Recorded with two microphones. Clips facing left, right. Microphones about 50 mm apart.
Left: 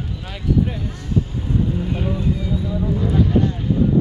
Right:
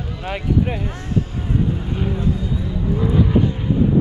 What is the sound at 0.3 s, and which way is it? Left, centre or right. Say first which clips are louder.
Speech: right 1 dB; right.